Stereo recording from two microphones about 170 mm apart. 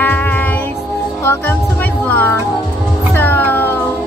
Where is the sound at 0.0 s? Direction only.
10° left (ahead or behind).